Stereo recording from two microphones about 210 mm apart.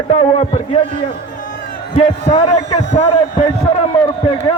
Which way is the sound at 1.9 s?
30° left (ahead or behind).